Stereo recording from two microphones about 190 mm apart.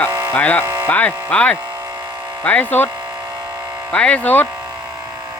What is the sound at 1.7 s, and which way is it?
Electric shaver, 15° right (ahead or behind).